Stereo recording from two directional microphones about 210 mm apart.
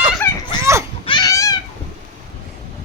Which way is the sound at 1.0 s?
20° left (ahead or behind).